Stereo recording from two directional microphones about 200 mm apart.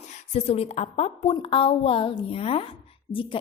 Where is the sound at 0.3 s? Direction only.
30° left (ahead or behind).